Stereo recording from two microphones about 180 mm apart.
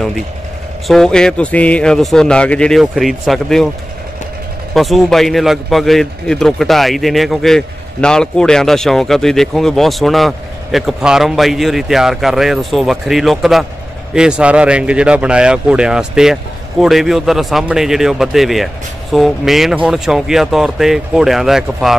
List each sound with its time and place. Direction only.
0.8 s a man's voice: 5° left (ahead or behind)
4.7 s a man's voice: centre (ahead or behind)